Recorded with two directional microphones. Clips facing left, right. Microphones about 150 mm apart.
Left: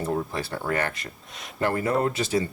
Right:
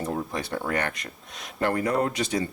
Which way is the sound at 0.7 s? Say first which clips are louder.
Left 1 dB; 30° left (ahead or behind).